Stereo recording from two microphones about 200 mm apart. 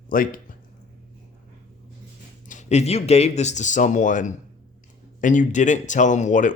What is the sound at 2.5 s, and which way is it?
Speech, 35° left (ahead or behind).